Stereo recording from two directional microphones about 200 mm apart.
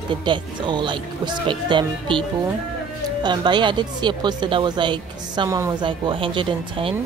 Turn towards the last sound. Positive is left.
turn(degrees=-25)  # may be behind; listen again after turning